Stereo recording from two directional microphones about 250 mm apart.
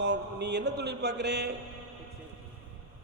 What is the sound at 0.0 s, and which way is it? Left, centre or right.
Speech, right.